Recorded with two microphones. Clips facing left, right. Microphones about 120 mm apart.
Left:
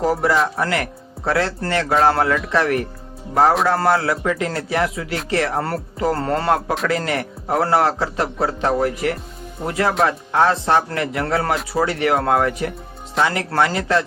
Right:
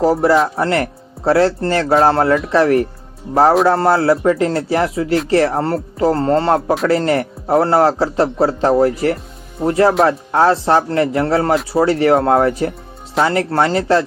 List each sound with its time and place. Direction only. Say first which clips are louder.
0.0 s a man's voice: right 5 dB; 30° right (ahead or behind)